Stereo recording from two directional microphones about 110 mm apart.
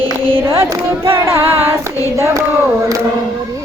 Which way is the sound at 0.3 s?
25° right (ahead or behind).